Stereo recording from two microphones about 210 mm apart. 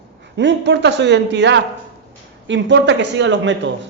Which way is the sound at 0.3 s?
55° right (ahead or behind).